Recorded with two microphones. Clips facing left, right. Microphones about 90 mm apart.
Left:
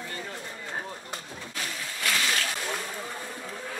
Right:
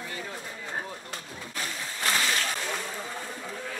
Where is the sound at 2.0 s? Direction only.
35° right (ahead or behind).